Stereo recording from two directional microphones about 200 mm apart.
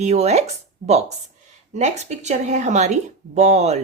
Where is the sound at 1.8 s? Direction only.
35° right (ahead or behind).